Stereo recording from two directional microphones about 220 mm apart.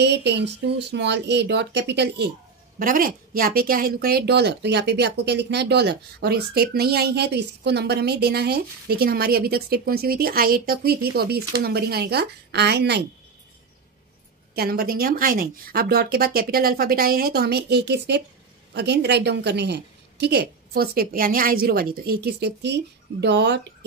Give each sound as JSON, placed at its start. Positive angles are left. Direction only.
{"t": 0.0, "sound": "speech", "side_deg": -50}
{"t": 2.8, "sound": "speech", "side_deg": -40}
{"t": 14.5, "sound": "speech", "side_deg": -45}